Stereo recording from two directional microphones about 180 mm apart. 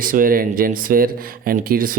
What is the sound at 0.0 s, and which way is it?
Speech, 50° right (ahead or behind).